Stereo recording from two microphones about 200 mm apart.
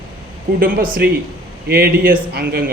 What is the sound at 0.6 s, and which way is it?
Speech, 45° right (ahead or behind).